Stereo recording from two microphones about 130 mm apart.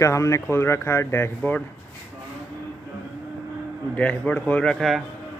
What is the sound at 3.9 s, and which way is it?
Speech, 10° left (ahead or behind).